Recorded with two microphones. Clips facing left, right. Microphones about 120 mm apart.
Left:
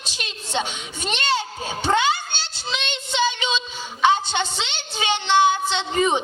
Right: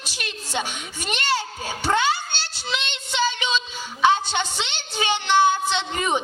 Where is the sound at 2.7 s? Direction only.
20° left (ahead or behind).